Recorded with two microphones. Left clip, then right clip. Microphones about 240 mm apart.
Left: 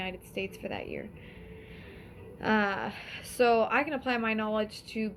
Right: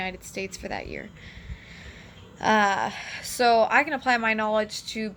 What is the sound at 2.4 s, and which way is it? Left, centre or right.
Speech, centre.